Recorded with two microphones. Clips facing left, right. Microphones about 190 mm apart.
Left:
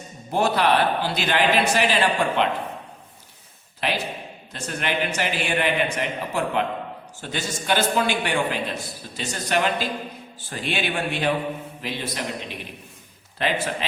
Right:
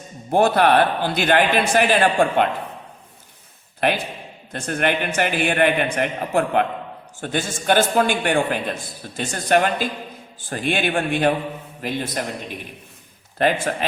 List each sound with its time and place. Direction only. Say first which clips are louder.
0.3 s a man's voice: right 4 dB; 50° right (ahead or behind)
3.8 s a man's voice: right 5 dB; 55° right (ahead or behind)